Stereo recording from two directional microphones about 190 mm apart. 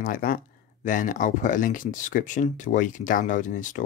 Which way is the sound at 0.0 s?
50° left (ahead or behind).